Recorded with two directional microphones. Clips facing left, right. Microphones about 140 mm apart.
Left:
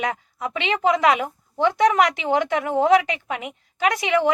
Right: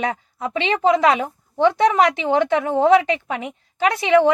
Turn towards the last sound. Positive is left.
turn(degrees=-30)  # may be behind; listen again after turning